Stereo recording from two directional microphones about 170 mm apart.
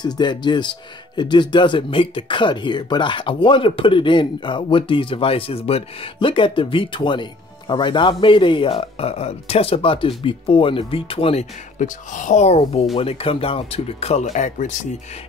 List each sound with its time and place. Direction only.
0.0 s speech: 25° left (ahead or behind)
11.8 s speech: 50° left (ahead or behind)